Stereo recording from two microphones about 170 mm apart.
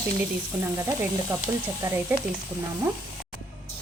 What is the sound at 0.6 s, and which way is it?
Speech, 15° right (ahead or behind).